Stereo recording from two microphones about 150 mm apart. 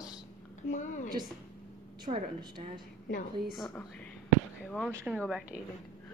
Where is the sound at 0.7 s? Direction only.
55° left (ahead or behind).